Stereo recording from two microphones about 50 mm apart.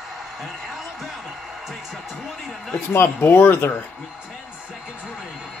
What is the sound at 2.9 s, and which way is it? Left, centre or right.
Speech, left.